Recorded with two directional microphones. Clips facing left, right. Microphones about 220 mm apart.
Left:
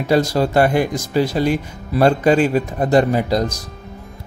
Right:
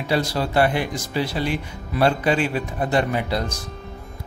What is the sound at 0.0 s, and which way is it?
Speech, 45° left (ahead or behind).